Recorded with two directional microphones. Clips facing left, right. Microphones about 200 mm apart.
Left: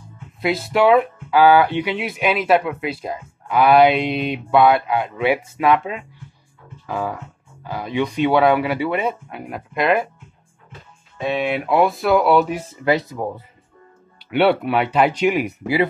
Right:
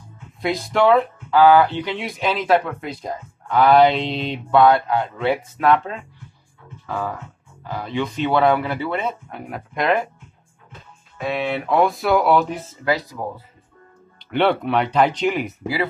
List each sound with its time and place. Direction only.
0.4 s speech: 5° left (ahead or behind)
9.4 s speech: centre (ahead or behind)
11.1 s speech: 15° left (ahead or behind)
12.8 s speech: 25° left (ahead or behind)
14.3 s speech: 5° left (ahead or behind); by 15.9 s 20° left (ahead or behind)